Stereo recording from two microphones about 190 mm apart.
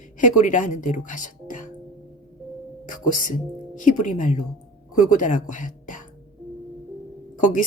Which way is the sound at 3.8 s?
40° left (ahead or behind).